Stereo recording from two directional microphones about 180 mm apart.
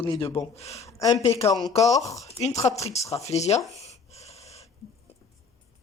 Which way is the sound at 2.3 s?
35° left (ahead or behind).